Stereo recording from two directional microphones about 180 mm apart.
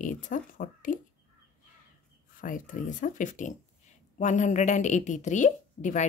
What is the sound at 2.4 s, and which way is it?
Speech, 45° left (ahead or behind).